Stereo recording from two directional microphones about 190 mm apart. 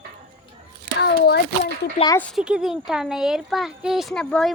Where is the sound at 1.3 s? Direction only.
60° left (ahead or behind).